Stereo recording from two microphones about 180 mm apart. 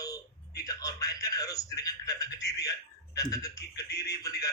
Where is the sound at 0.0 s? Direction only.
20° left (ahead or behind).